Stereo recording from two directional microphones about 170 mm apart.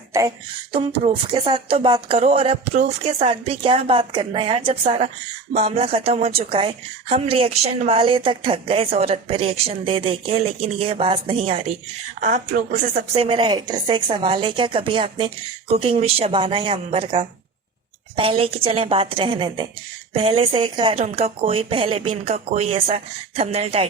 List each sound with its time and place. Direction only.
0.1 s beatboxing: 20° right (ahead or behind)
0.7 s a woman's voice: 35° right (ahead or behind)
12.2 s a woman's voice: 45° right (ahead or behind)
13.1 s a woman's voice: 30° right (ahead or behind)